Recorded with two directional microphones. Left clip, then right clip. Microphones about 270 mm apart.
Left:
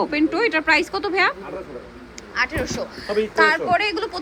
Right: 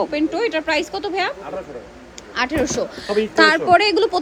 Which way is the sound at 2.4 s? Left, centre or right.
Right.